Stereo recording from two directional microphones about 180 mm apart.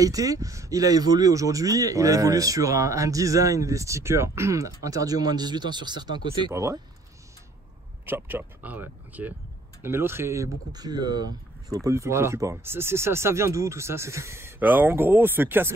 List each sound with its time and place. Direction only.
0.0 s speech: 20° right (ahead or behind)
8.0 s speech: 10° right (ahead or behind)